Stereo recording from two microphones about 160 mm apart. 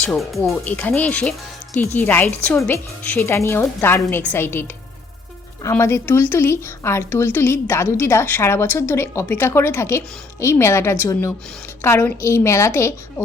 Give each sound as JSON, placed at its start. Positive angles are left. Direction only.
{"t": 0.0, "sound": "speech", "side_deg": 5}
{"t": 5.6, "sound": "speech", "side_deg": 15}